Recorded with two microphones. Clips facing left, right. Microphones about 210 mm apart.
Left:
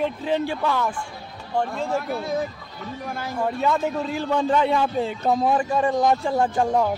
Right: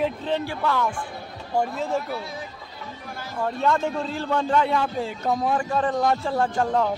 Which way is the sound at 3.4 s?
5° left (ahead or behind).